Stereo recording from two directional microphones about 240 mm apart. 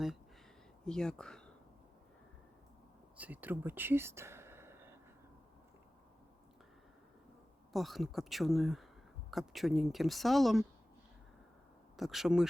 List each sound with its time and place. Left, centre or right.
0.9 s speech: centre
3.2 s speech: centre
7.7 s speech: centre
11.9 s speech: centre